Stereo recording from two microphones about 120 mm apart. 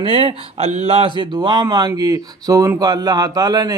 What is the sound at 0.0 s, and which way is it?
A man's voice, 45° right (ahead or behind).